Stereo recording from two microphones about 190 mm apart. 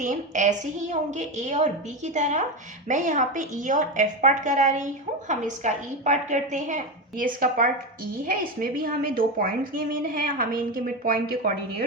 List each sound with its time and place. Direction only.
0.0 s a woman's voice: 40° right (ahead or behind)